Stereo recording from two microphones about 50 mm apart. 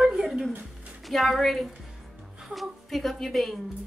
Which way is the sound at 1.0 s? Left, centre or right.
Centre.